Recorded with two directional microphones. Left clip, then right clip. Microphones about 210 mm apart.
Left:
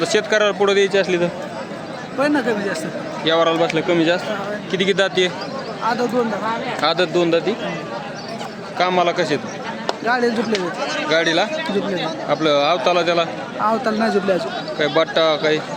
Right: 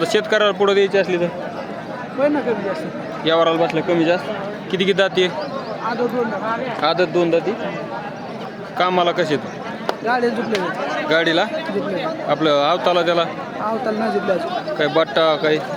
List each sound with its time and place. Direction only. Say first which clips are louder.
0.0 s speech: even; 5° right (ahead or behind)
3.2 s speech: even; centre (ahead or behind)
4.7 s speech: right 1 dB; 5° right (ahead or behind)
6.8 s speech: even; 10° left (ahead or behind)
8.8 s speech: even; 5° right (ahead or behind)
10.1 s a man's voice: even; 30° left (ahead or behind)
11.1 s speech: even; centre (ahead or behind)
13.7 s a man's voice: left 2 dB; 40° left (ahead or behind)
14.8 s speech: even; 5° right (ahead or behind)